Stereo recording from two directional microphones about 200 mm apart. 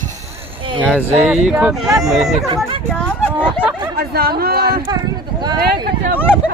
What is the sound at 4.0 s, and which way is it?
Speech, 50° right (ahead or behind).